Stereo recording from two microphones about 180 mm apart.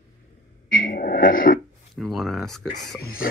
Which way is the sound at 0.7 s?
50° left (ahead or behind).